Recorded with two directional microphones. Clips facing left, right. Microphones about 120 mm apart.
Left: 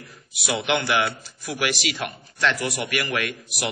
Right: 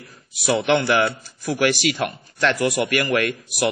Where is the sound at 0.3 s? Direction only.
40° right (ahead or behind).